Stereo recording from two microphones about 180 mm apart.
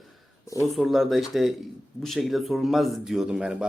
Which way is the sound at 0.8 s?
Centre (ahead or behind).